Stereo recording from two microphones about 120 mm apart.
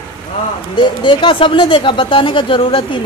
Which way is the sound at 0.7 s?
40° left (ahead or behind).